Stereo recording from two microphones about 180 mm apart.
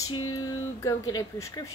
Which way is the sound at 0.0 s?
20° left (ahead or behind).